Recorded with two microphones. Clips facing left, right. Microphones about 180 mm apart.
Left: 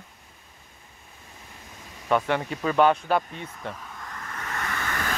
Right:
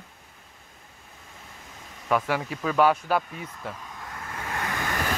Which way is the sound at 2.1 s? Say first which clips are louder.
Left 1 dB; 5° right (ahead or behind).